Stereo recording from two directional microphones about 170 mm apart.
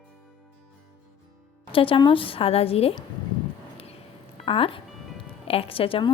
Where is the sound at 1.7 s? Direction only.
30° left (ahead or behind).